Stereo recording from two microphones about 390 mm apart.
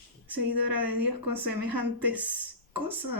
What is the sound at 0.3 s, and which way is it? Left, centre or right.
Speech, right.